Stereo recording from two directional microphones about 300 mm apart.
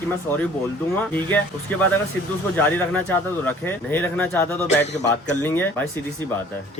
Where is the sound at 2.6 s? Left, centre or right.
Centre.